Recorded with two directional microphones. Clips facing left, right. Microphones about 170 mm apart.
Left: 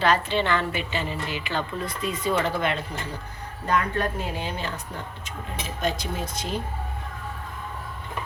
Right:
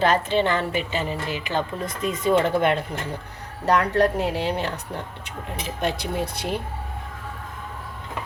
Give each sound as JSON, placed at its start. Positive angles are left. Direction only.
{"t": 0.0, "sound": "a woman's voice", "side_deg": -45}
{"t": 3.7, "sound": "a woman's voice", "side_deg": -75}
{"t": 5.8, "sound": "speech", "side_deg": -65}